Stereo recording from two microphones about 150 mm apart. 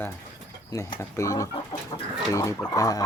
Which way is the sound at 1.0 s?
20° left (ahead or behind).